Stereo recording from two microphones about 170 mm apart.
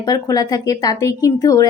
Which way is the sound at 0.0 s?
20° left (ahead or behind).